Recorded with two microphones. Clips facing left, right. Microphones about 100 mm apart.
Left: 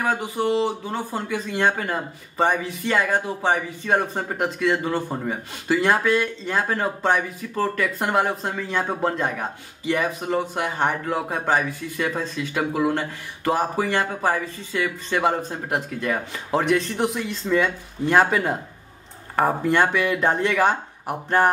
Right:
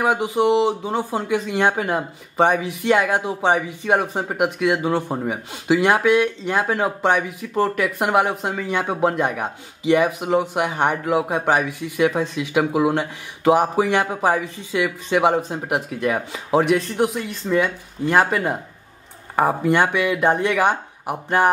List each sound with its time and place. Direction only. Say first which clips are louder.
0.0 s speech: right 5 dB; 15° right (ahead or behind)